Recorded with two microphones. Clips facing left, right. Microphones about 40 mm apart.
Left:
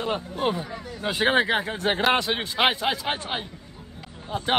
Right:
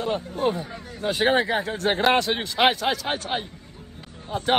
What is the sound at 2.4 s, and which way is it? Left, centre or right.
Speech, left.